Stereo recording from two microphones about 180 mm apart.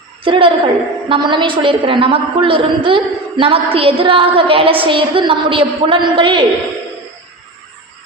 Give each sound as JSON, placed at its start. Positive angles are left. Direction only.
{"t": 0.3, "sound": "a woman's voice", "side_deg": -30}